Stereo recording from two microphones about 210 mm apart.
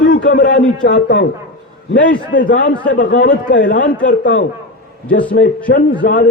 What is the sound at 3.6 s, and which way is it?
Speech, 40° left (ahead or behind).